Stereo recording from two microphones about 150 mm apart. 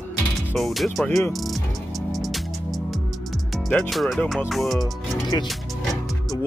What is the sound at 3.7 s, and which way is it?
Speech, centre (ahead or behind).